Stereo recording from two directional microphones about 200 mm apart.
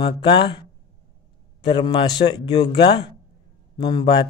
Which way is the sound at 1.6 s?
25° left (ahead or behind).